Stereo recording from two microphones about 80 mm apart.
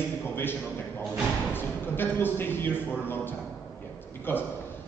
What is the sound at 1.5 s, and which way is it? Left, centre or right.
A man's voice, left.